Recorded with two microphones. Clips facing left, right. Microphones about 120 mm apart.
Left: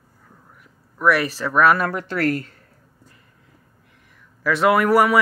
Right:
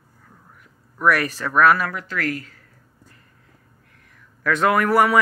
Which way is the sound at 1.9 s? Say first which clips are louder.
Left 5 dB; 35° left (ahead or behind).